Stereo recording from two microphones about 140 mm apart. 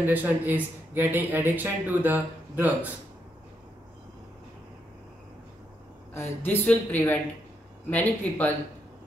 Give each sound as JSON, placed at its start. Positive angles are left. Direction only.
{"t": 0.0, "sound": "speech", "side_deg": -15}
{"t": 6.1, "sound": "speech", "side_deg": 15}